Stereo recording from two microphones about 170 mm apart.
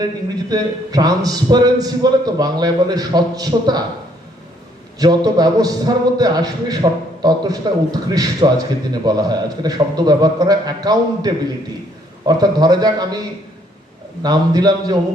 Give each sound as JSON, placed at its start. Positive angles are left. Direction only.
{"t": 0.5, "sound": "a man's voice", "side_deg": -20}
{"t": 4.9, "sound": "a man's voice", "side_deg": -20}
{"t": 14.2, "sound": "a man's voice", "side_deg": -25}